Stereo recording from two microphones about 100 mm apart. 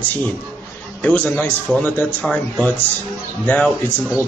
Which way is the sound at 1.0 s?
15° left (ahead or behind).